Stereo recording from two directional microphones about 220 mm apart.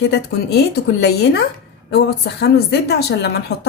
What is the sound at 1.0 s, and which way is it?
A woman's voice, 50° left (ahead or behind).